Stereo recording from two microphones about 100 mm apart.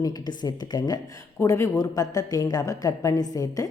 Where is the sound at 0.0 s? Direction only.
40° left (ahead or behind).